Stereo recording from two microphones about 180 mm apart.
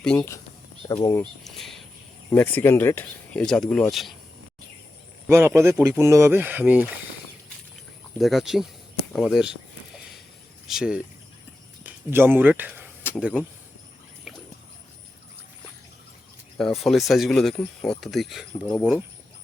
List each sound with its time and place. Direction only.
0.0 s speech: 5° left (ahead or behind)
0.8 s speech: 15° left (ahead or behind)
1.2 s speech: centre (ahead or behind)
2.3 s speech: 10° left (ahead or behind)
5.3 s speech: 15° right (ahead or behind)
8.2 s speech: centre (ahead or behind)
10.7 s speech: 5° right (ahead or behind)
14.3 s a sound: 5° right (ahead or behind)
16.6 s speech: centre (ahead or behind)